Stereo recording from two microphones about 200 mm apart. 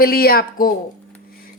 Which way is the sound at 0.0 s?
50° left (ahead or behind).